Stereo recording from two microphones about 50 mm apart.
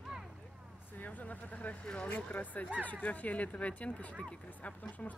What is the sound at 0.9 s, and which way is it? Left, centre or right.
Speech, left.